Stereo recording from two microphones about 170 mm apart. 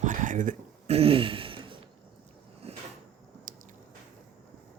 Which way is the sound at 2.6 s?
35° right (ahead or behind).